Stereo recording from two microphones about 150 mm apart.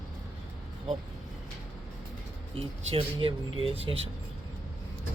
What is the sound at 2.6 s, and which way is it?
A man's voice, 35° right (ahead or behind).